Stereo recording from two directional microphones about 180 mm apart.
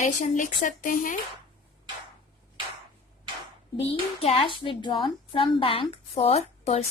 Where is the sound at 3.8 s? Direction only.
35° left (ahead or behind).